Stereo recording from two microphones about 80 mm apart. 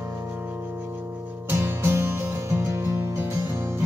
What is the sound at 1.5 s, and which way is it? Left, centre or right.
Music, right.